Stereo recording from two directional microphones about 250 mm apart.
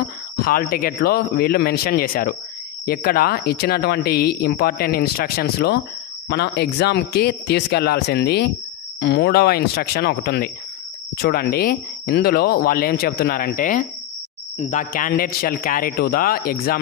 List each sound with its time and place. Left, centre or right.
0.0 s speech: left